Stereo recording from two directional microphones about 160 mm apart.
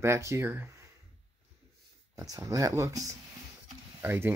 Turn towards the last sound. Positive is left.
turn(degrees=-10)  # may be behind; listen again after turning